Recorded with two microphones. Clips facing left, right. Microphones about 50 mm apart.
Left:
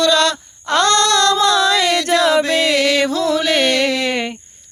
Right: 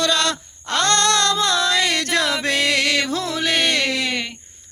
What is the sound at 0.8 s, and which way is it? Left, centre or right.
Female singing, right.